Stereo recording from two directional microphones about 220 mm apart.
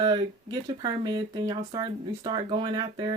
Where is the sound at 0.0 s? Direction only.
20° right (ahead or behind).